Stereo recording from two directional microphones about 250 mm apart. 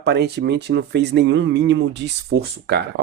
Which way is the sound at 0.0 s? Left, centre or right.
Right.